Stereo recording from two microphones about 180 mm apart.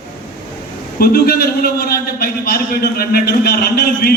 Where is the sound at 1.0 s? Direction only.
60° left (ahead or behind).